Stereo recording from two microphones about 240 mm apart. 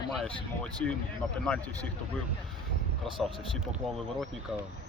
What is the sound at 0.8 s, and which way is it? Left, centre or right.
Speech, centre.